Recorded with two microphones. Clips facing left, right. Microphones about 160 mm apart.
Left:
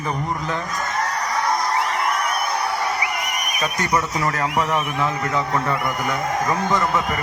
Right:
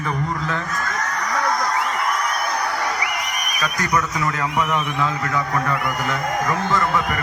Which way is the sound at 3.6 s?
25° left (ahead or behind).